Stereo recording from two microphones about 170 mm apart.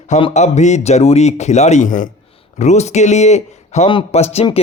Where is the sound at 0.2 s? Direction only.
40° left (ahead or behind).